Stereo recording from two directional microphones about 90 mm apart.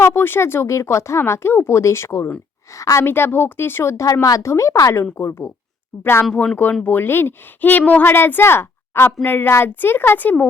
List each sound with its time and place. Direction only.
0.0 s speech: 30° left (ahead or behind)
3.0 s speech: 25° left (ahead or behind)